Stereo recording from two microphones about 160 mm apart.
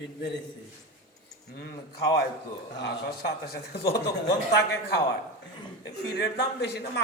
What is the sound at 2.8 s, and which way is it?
A man's voice, 75° left (ahead or behind).